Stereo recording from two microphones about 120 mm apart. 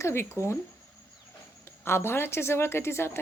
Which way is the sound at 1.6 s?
20° left (ahead or behind).